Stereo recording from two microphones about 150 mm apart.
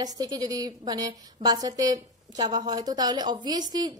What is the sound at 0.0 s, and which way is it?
A woman's voice, 25° right (ahead or behind).